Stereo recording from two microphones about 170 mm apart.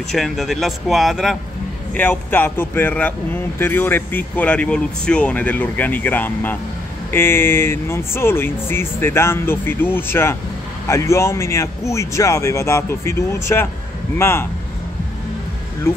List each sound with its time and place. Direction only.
0.1 s speech: centre (ahead or behind)
2.0 s speech: 10° left (ahead or behind)